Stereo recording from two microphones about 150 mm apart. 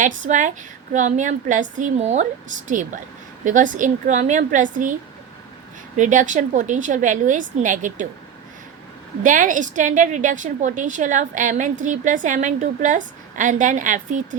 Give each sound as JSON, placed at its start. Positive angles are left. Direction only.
{"t": 0.0, "sound": "a woman's voice", "side_deg": -55}
{"t": 6.0, "sound": "a woman's voice", "side_deg": -55}
{"t": 9.2, "sound": "a woman's voice", "side_deg": -60}